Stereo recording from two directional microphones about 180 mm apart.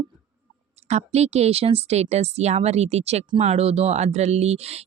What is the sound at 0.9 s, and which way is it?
Speech, 35° right (ahead or behind).